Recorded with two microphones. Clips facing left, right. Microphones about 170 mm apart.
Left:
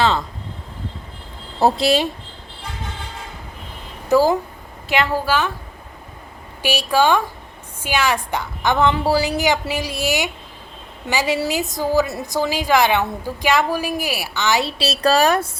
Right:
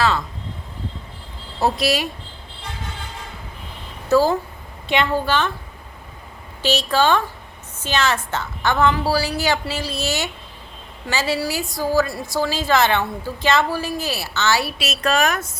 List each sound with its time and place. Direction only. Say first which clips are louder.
1.6 s a woman's voice: left 4 dB; 25° left (ahead or behind)
4.1 s a woman's voice: left 1 dB; 15° left (ahead or behind)
6.6 s a woman's voice: left 1 dB; 10° left (ahead or behind); by 15.4 s 30° left (ahead or behind)